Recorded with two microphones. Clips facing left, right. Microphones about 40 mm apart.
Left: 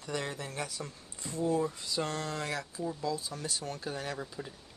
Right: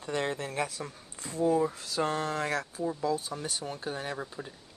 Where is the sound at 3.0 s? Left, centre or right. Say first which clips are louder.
Right 5 dB; right.